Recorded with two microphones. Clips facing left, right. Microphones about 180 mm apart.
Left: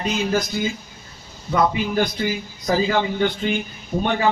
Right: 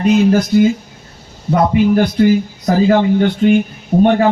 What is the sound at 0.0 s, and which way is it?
Speech, 55° right (ahead or behind).